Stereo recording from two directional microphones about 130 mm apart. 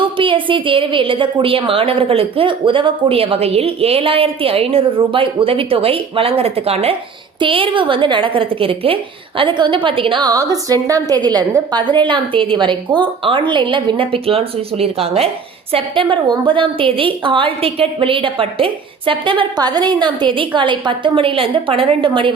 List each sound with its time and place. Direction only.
0.0 s a woman's voice: 40° right (ahead or behind)